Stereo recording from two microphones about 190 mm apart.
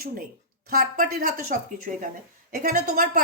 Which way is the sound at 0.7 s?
50° right (ahead or behind).